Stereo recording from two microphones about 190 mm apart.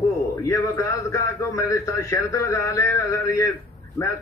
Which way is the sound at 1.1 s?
15° left (ahead or behind).